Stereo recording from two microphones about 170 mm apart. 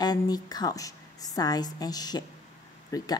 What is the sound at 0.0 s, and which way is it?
Speech, 25° left (ahead or behind).